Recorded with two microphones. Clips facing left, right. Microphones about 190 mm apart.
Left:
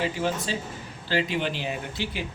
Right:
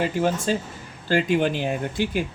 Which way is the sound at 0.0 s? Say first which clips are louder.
Right 5 dB; 50° right (ahead or behind).